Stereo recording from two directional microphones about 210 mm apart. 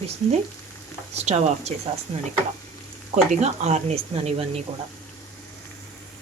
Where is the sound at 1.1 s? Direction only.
30° right (ahead or behind).